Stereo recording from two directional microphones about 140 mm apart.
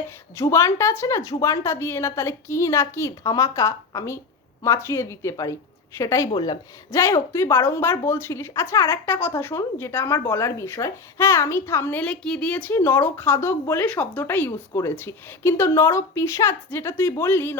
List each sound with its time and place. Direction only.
0.3 s a woman's voice: 20° left (ahead or behind)